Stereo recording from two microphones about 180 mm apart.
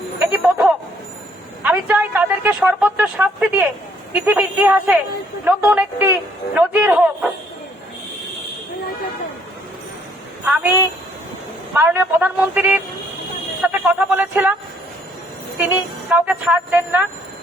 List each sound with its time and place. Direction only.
0.2 s a sound: 10° right (ahead or behind)
1.6 s speech: 5° right (ahead or behind)
10.4 s speech: 10° right (ahead or behind)
13.6 s music: 10° right (ahead or behind)
15.5 s speech: 5° right (ahead or behind)